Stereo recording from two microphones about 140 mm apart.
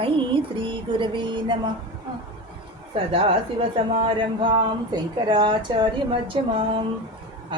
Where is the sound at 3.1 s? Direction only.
40° right (ahead or behind).